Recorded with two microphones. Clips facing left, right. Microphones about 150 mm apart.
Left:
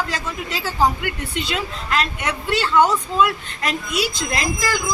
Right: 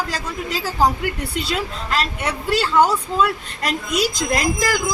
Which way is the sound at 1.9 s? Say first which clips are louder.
Even; 35° right (ahead or behind).